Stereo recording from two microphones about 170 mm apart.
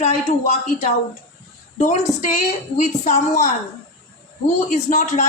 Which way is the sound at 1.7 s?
45° left (ahead or behind).